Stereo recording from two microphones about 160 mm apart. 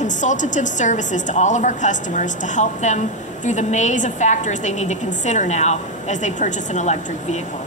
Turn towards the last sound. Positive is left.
turn(degrees=45)  # may be behind; listen again after turning